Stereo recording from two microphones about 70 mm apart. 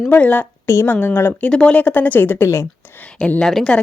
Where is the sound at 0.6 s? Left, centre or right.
Left.